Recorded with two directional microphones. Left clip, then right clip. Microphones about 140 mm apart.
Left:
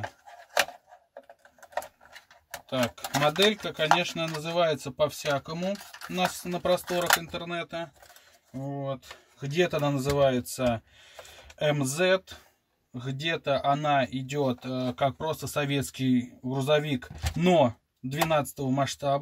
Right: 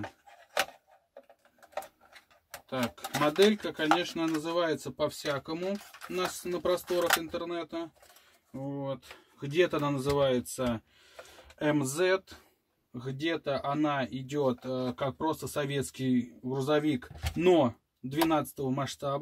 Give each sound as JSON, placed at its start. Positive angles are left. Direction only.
{"t": 2.7, "sound": "speech", "side_deg": -5}
{"t": 9.5, "sound": "speech", "side_deg": -15}